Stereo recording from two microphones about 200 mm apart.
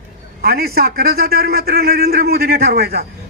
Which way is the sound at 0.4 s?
50° right (ahead or behind).